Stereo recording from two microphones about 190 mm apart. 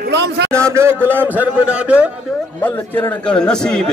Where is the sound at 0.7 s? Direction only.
15° right (ahead or behind).